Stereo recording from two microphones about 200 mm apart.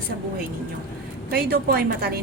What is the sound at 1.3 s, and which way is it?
Speech, 50° right (ahead or behind).